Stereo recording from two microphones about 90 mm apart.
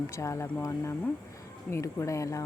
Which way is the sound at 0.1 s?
35° left (ahead or behind).